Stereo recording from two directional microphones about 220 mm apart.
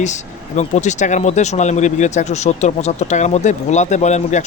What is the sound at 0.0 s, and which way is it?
Speech, 35° left (ahead or behind).